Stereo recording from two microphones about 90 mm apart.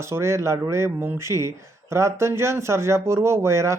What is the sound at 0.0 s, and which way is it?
A man's voice, 30° right (ahead or behind).